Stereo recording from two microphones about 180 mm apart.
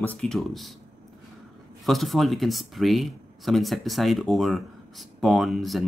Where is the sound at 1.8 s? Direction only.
Centre (ahead or behind).